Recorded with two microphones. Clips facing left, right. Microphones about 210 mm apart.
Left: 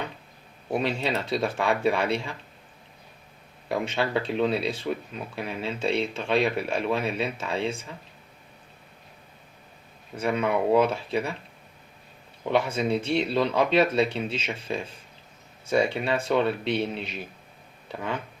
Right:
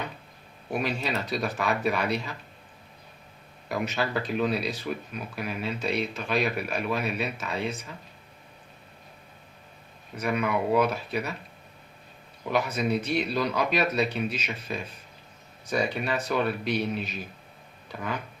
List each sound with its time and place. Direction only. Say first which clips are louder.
0.7 s speech: left 3 dB; 30° left (ahead or behind)
3.7 s speech: left 2 dB; 30° left (ahead or behind)
10.2 s speech: left 2 dB; 30° left (ahead or behind)
12.5 s speech: left 2 dB; 30° left (ahead or behind)